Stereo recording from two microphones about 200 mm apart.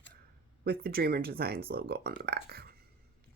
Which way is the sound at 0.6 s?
50° right (ahead or behind).